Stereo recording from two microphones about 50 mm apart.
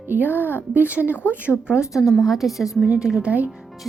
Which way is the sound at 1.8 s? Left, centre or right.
Left.